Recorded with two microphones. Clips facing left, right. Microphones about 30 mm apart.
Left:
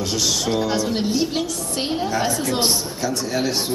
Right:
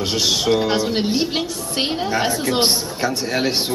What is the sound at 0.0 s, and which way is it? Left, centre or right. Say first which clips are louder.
A woman's voice: right 3 dB; right.